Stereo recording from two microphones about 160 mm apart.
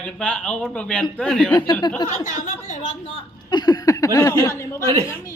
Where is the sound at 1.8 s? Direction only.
25° left (ahead or behind).